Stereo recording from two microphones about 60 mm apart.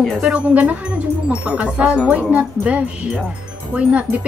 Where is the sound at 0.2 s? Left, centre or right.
Centre.